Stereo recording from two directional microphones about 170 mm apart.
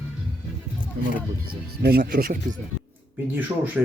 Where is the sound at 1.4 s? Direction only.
65° right (ahead or behind).